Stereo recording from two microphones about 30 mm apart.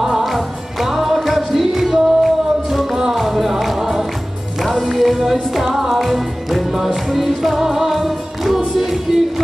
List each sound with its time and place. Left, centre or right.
0.2 s music: centre